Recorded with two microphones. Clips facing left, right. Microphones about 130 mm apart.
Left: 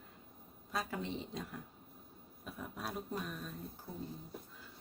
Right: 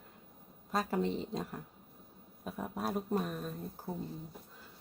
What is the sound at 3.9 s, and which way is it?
Speech, 55° right (ahead or behind).